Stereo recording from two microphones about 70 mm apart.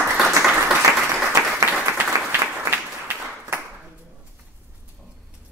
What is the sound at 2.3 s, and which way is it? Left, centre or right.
Applause, right.